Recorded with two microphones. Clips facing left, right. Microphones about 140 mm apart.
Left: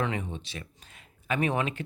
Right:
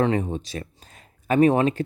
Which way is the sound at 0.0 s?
35° right (ahead or behind).